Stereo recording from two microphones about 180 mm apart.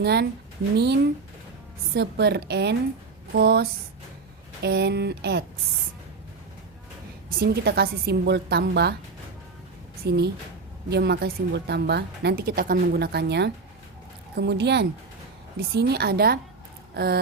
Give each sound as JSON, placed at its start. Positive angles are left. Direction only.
{"t": 0.0, "sound": "a woman's voice", "side_deg": -65}
{"t": 2.0, "sound": "a woman's voice", "side_deg": -65}
{"t": 7.3, "sound": "a woman's voice", "side_deg": -60}
{"t": 10.1, "sound": "a woman's voice", "side_deg": -65}
{"t": 16.9, "sound": "a sound", "side_deg": -60}